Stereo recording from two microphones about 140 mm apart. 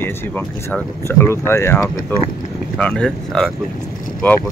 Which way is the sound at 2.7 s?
5° left (ahead or behind).